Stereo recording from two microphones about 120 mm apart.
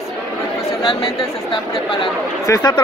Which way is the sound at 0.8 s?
45° left (ahead or behind).